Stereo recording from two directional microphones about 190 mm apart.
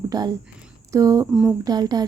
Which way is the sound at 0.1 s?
20° right (ahead or behind).